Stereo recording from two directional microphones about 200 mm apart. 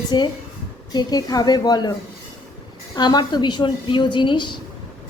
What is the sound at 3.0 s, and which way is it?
A woman's voice, 20° left (ahead or behind).